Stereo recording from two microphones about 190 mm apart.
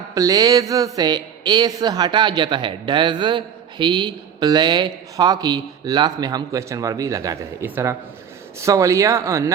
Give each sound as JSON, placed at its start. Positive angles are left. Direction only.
{"t": 0.1, "sound": "a woman's voice", "side_deg": -20}